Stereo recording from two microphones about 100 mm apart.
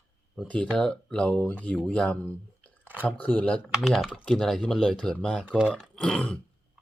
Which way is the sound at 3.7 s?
5° right (ahead or behind).